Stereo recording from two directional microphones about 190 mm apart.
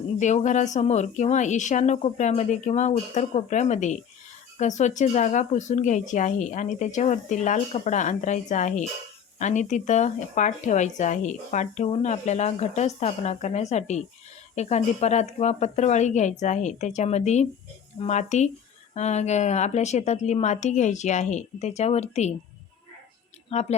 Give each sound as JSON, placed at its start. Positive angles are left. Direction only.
{"t": 0.2, "sound": "speech", "side_deg": 40}
{"t": 23.5, "sound": "speech", "side_deg": 35}